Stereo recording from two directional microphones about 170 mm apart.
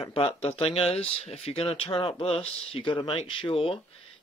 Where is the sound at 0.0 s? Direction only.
35° left (ahead or behind).